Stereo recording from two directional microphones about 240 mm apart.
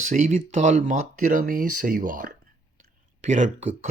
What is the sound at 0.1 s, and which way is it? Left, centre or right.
Speech, right.